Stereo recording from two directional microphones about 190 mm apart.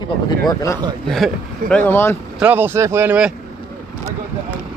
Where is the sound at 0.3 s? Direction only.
20° left (ahead or behind).